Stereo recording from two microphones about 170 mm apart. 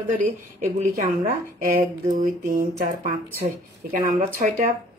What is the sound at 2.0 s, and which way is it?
Speech, 50° right (ahead or behind).